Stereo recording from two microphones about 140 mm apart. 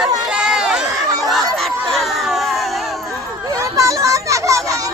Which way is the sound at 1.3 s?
Centre (ahead or behind).